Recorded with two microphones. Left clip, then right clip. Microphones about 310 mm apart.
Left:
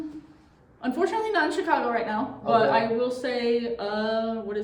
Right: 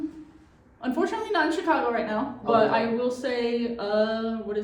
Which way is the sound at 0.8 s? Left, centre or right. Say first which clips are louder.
Left 2 dB; centre.